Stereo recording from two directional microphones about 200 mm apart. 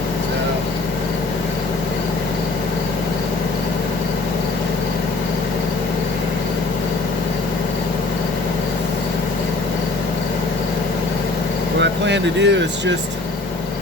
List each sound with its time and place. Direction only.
11.8 s vehicle: 60° right (ahead or behind)